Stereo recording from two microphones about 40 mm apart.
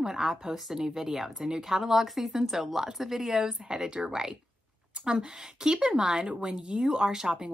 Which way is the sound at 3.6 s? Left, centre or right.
Centre.